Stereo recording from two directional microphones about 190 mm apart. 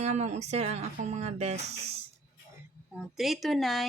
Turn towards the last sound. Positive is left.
turn(degrees=0)  # may be behind; listen again after turning